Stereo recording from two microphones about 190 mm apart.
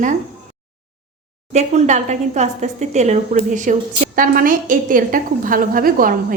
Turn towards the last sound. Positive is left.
turn(degrees=-45)  # may be behind; listen again after turning